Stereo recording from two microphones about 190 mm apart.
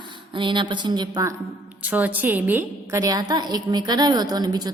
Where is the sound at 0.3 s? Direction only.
25° right (ahead or behind).